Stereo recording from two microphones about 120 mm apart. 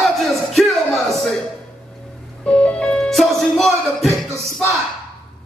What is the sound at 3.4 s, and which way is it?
Speech, centre (ahead or behind).